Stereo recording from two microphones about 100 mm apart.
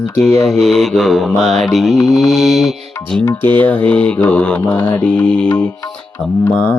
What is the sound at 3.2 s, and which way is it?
Music, 20° left (ahead or behind).